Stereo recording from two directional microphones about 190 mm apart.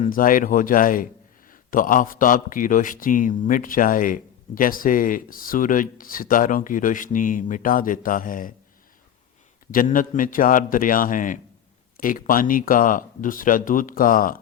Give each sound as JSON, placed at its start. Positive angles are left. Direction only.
{"t": 0.0, "sound": "a man's voice", "side_deg": 45}
{"t": 9.7, "sound": "a man's voice", "side_deg": 45}